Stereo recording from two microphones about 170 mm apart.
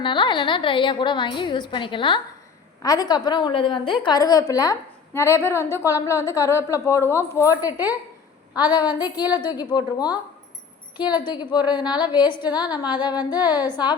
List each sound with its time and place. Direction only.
0.0 s a woman's voice: 30° left (ahead or behind)